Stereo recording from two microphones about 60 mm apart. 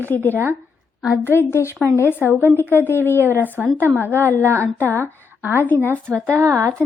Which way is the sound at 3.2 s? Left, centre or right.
Right.